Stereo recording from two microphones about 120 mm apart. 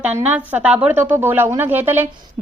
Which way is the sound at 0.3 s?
10° right (ahead or behind).